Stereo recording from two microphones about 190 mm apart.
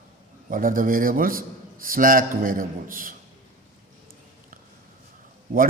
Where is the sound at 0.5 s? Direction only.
45° right (ahead or behind).